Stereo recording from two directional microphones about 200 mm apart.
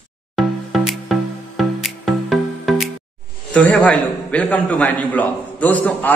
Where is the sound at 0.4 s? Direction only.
Centre (ahead or behind).